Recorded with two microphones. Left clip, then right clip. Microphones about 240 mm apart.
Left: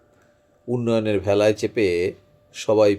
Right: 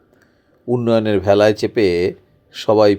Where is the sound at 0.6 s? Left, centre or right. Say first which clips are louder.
Right 6 dB; centre.